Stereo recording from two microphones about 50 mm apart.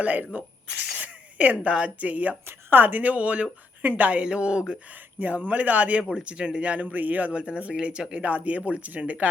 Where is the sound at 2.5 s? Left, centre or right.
Right; by 4.8 s centre.